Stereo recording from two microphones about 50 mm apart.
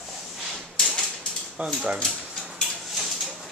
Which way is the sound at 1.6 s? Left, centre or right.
Right.